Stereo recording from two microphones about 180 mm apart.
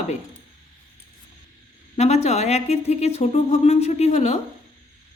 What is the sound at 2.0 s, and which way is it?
Speech, 40° left (ahead or behind).